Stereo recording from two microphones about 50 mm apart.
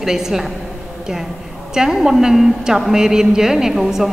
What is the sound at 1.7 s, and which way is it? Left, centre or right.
A woman's voice, centre.